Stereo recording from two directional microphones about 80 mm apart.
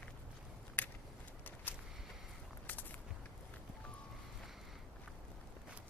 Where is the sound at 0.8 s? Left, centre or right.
Left.